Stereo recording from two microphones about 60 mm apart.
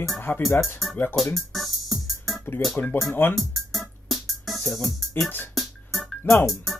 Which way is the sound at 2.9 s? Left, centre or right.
Left.